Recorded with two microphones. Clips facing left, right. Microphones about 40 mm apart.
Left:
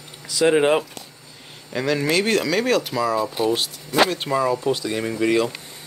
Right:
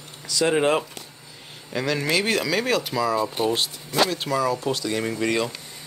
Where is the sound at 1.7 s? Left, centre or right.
Centre.